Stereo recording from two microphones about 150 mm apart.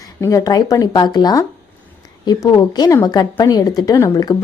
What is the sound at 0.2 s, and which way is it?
Speech, 20° left (ahead or behind).